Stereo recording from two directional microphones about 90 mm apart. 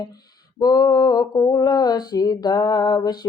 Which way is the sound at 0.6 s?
45° left (ahead or behind).